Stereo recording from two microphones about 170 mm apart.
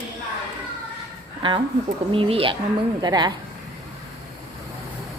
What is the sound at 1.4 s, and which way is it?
Speech, 30° right (ahead or behind).